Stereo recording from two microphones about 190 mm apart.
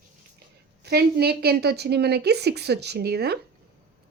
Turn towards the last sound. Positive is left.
turn(degrees=-55)  # may be behind; listen again after turning